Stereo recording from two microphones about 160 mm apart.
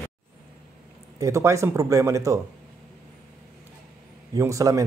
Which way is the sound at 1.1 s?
20° right (ahead or behind).